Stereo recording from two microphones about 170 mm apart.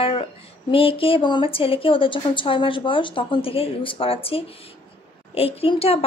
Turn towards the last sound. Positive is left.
turn(degrees=35)  # may be behind; listen again after turning